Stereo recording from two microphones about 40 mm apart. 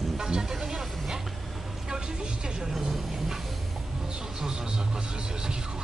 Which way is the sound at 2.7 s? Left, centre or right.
Centre.